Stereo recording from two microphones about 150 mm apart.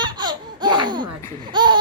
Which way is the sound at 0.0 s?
30° right (ahead or behind).